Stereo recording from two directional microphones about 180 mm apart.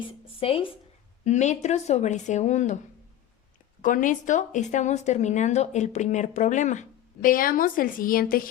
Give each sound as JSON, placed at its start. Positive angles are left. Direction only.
{"t": 0.0, "sound": "speech", "side_deg": 30}
{"t": 3.8, "sound": "speech", "side_deg": 45}